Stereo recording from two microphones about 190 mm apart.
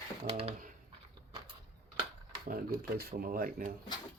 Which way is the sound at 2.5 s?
50° right (ahead or behind).